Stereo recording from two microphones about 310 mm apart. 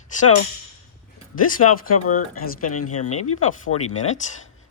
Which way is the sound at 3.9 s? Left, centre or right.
Left.